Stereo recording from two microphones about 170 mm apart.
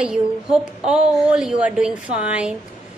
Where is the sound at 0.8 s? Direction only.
5° right (ahead or behind).